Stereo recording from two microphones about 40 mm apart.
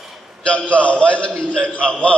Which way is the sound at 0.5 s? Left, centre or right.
Left.